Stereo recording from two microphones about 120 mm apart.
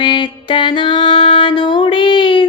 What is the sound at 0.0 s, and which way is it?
Music, 40° left (ahead or behind).